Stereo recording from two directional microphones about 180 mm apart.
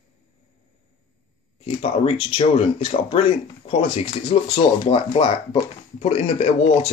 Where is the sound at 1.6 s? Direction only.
30° left (ahead or behind).